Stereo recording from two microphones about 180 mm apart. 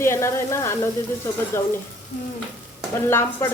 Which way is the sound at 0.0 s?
15° left (ahead or behind).